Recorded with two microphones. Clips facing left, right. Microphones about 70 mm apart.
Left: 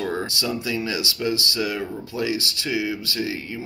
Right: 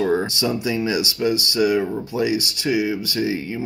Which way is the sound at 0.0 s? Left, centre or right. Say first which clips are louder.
Right 6 dB; centre.